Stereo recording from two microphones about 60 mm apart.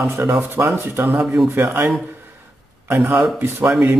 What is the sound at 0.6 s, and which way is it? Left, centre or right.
Speech, right.